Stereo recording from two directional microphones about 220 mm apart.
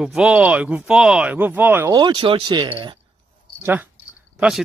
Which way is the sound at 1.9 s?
20° right (ahead or behind).